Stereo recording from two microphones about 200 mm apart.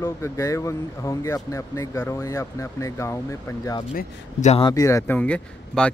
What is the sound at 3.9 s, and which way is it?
Speech, 35° left (ahead or behind).